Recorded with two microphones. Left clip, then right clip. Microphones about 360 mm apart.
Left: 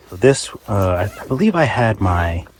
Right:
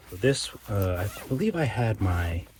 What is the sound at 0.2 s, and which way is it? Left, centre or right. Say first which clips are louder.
Speech: left 11 dB; centre.